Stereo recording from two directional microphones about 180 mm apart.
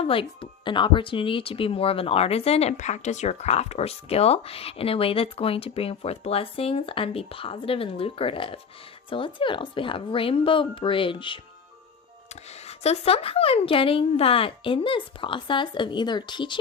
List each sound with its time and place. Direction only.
0.0 s speech: 30° left (ahead or behind)
12.6 s speech: 35° left (ahead or behind)